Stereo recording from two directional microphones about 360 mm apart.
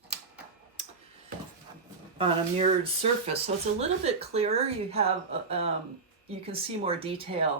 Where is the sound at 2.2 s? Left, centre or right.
Centre.